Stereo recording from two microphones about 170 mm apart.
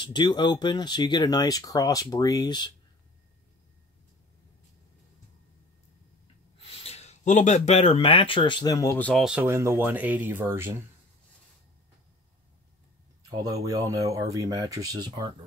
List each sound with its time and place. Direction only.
0.0 s speech: 25° left (ahead or behind)
6.6 s speech: 35° left (ahead or behind); by 9.2 s 10° left (ahead or behind)
9.2 s speech: 10° right (ahead or behind)
13.3 s speech: 20° right (ahead or behind)